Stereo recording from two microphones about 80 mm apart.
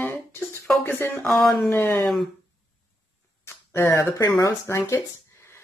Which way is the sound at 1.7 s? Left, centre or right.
Left.